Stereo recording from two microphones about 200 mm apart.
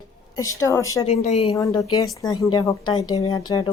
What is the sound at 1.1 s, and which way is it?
Speech, 35° left (ahead or behind).